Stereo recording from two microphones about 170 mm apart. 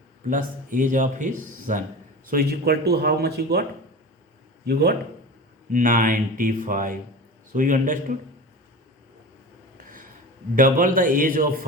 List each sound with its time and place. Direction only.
0.3 s speech: 50° right (ahead or behind); by 4.9 s 70° right (ahead or behind)
5.7 s speech: 50° right (ahead or behind)
9.7 s a sound: 50° right (ahead or behind)
10.5 s speech: 50° right (ahead or behind)